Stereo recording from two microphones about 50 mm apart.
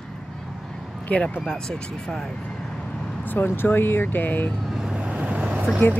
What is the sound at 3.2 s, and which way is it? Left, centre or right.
Speech, left.